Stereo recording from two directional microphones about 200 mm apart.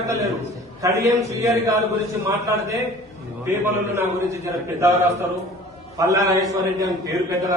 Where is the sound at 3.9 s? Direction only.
10° right (ahead or behind).